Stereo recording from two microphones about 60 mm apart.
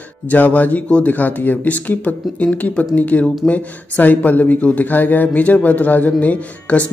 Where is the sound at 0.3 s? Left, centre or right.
Left.